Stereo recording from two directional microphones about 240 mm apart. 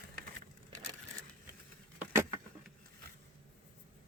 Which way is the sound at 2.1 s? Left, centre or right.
Centre.